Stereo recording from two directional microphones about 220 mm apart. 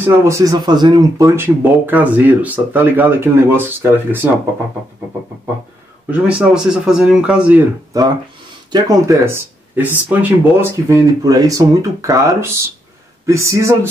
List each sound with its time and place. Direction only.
0.0 s speech: 10° right (ahead or behind)
6.0 s speech: 5° right (ahead or behind)
7.9 s speech: 15° right (ahead or behind)